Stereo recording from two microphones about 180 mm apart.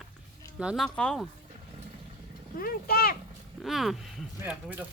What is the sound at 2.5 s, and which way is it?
Speech, 55° left (ahead or behind).